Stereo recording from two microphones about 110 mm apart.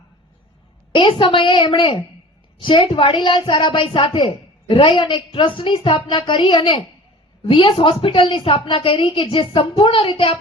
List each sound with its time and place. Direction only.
0.9 s a woman's voice: 50° left (ahead or behind)